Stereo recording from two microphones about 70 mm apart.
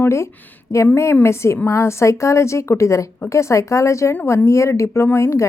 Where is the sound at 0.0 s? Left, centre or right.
Left.